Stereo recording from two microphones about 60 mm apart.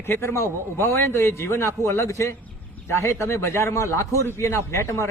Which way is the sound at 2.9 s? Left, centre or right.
Left.